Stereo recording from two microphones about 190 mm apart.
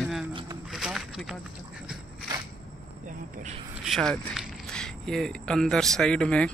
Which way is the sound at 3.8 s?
Centre (ahead or behind).